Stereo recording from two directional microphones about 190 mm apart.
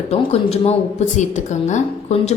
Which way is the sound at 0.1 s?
35° left (ahead or behind).